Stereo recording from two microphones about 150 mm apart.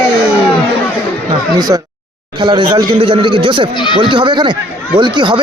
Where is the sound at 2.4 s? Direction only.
30° right (ahead or behind).